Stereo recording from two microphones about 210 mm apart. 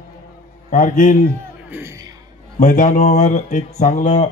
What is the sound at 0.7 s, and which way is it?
Speech, 40° left (ahead or behind).